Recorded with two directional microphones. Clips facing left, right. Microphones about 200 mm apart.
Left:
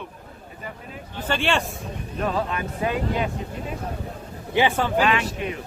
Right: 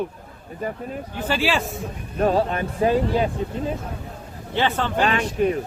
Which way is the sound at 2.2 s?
40° right (ahead or behind).